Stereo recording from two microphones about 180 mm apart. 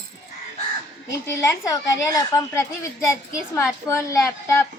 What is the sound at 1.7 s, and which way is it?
A child's voice, 20° left (ahead or behind).